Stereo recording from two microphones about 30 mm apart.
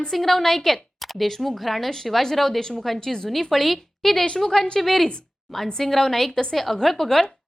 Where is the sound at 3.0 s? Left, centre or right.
Centre.